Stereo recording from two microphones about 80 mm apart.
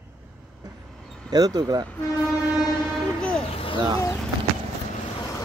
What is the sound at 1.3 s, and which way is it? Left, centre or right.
Speech, right.